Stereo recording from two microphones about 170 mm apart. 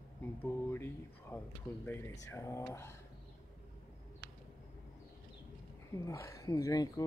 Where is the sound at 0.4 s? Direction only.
15° left (ahead or behind).